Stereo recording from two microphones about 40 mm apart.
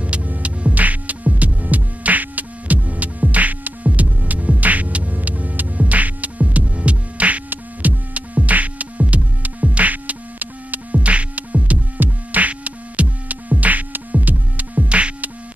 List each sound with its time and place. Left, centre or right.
0.0 s music: right